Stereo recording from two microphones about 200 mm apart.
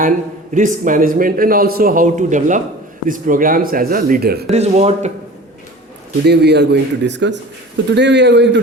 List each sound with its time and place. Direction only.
0.5 s a man's voice: 40° right (ahead or behind)
4.5 s speech: 35° right (ahead or behind)
6.2 s a man's voice: 55° right (ahead or behind)